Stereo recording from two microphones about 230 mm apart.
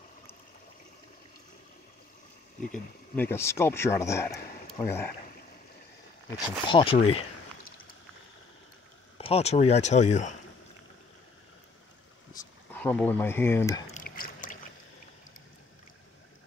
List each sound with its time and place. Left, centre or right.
3.2 s a man's voice: centre
6.3 s speech: left
9.2 s speech: left
12.4 s speech: centre
13.8 s a sound: left